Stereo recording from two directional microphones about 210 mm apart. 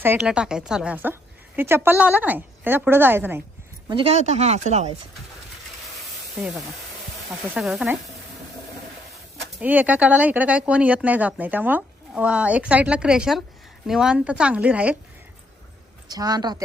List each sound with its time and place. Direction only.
0.0 s speech: 5° right (ahead or behind)
3.8 s speech: 25° right (ahead or behind)
7.5 s a woman's voice: 5° right (ahead or behind)
9.6 s a woman's voice: 5° right (ahead or behind)
16.0 s speech: 20° right (ahead or behind)